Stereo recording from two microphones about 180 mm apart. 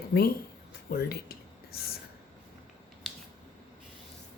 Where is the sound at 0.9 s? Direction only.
60° left (ahead or behind).